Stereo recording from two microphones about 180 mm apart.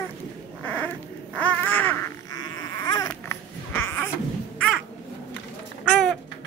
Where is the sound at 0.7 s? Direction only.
10° left (ahead or behind).